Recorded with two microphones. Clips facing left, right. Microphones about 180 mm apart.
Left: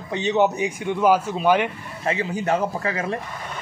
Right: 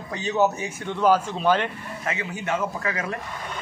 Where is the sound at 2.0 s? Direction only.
30° left (ahead or behind).